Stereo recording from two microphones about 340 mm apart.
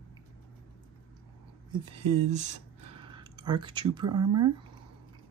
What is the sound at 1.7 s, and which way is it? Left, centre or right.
Speech, centre.